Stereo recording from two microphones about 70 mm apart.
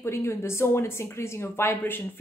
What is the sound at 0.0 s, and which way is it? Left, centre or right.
A woman's voice, left.